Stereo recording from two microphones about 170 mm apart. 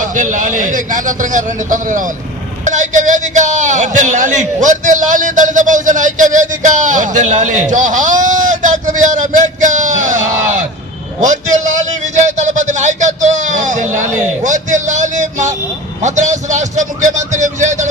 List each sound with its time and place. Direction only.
0.0 s a man's voice: 45° right (ahead or behind)